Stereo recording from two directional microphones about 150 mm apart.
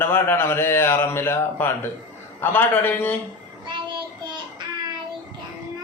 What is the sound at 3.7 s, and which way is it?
Child singing, 30° right (ahead or behind).